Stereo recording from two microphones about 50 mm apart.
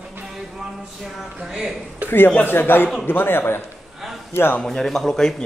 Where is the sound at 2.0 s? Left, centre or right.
Left.